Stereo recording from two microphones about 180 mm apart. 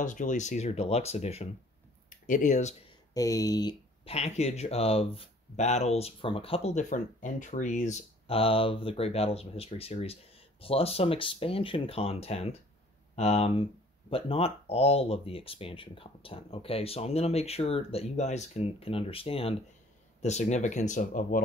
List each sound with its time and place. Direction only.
0.0 s speech: 45° left (ahead or behind)
2.0 s speech: 45° left (ahead or behind)
3.2 s speech: 20° left (ahead or behind)
4.1 s speech: 35° left (ahead or behind)